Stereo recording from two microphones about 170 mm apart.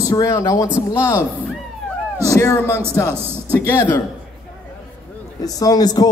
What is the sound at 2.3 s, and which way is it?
Speech, 15° left (ahead or behind).